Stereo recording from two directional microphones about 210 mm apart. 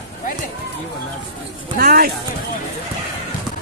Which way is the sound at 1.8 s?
45° right (ahead or behind).